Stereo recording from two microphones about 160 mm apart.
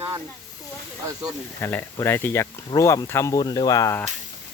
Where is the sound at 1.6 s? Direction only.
15° left (ahead or behind).